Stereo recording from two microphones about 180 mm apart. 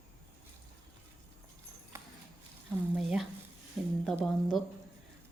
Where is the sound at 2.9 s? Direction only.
5° right (ahead or behind).